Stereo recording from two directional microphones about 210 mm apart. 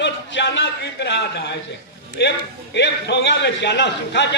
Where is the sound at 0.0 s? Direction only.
55° left (ahead or behind).